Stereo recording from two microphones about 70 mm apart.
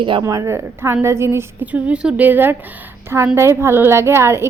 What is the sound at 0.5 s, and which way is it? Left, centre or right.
Speech, right.